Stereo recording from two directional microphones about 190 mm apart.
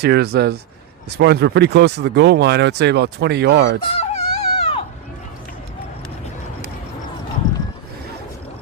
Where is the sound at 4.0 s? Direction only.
35° left (ahead or behind).